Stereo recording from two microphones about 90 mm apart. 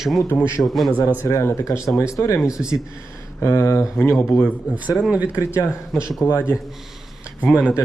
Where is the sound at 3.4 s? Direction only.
35° left (ahead or behind).